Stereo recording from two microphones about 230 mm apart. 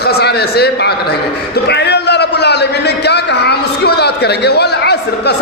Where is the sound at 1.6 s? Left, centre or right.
Left.